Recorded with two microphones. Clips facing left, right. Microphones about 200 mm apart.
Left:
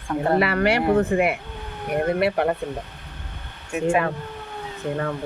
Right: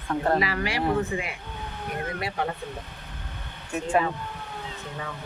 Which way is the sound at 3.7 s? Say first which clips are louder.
Left 4 dB; 10° left (ahead or behind).